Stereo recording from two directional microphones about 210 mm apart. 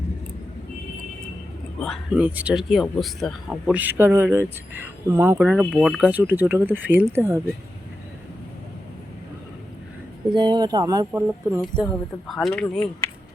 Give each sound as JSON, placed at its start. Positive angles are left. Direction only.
{"t": 1.8, "sound": "speech", "side_deg": 0}
{"t": 10.3, "sound": "speech", "side_deg": -20}
{"t": 12.3, "sound": "speech", "side_deg": 0}